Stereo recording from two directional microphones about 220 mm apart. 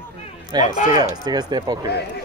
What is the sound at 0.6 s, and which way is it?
Speech, 35° left (ahead or behind).